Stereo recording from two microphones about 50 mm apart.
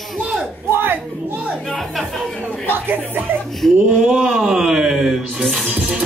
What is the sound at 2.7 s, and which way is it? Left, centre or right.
Speech, right.